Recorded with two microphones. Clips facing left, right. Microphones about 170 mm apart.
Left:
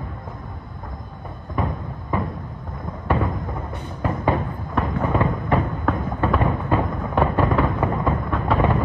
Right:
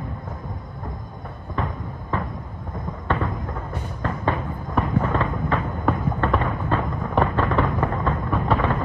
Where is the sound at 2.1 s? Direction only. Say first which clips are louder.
Left 3 dB; 10° left (ahead or behind).